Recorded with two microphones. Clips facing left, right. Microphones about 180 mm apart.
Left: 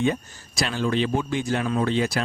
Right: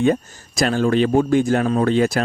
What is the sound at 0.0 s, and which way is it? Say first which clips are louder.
Speech: right 6 dB; 45° right (ahead or behind).